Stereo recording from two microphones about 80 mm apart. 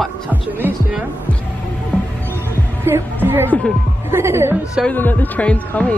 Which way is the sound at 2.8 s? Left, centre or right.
Right.